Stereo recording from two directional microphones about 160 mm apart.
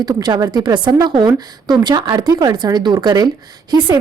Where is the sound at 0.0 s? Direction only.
25° right (ahead or behind).